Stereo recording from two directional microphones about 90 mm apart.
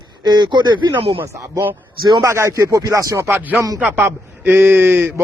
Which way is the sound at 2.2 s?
35° right (ahead or behind).